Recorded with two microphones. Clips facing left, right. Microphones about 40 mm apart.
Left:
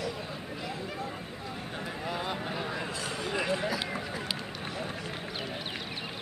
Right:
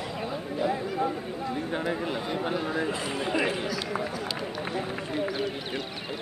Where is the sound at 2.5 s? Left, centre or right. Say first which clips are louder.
Right 6 dB; right.